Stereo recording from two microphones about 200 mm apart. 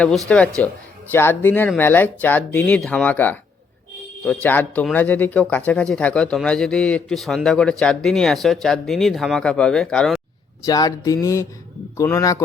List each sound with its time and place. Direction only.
0.3 s speech: 5° left (ahead or behind)
4.4 s speech: 10° left (ahead or behind)
10.7 s speech: 20° left (ahead or behind)